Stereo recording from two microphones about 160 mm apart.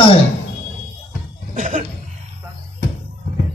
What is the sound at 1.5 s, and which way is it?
Cough, 50° right (ahead or behind).